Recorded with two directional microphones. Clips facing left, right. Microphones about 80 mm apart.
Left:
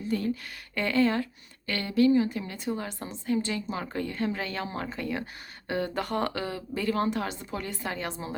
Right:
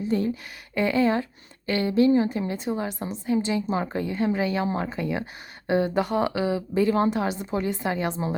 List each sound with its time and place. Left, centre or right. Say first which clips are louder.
0.0 s speech: right 4 dB; right